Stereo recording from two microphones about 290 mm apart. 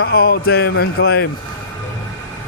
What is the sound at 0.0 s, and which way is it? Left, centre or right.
Speech, left.